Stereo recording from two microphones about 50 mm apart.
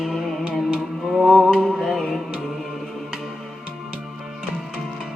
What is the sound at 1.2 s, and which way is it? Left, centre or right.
Music, centre.